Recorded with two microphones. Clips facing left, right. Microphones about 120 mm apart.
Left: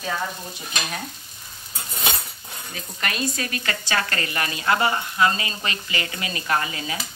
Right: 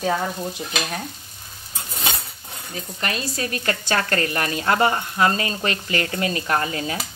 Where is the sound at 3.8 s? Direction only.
45° right (ahead or behind).